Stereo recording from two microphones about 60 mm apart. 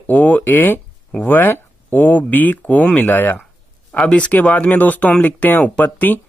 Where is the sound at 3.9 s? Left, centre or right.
Centre.